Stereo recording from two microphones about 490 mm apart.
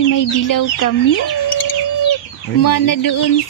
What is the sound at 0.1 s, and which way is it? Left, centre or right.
Speech, left.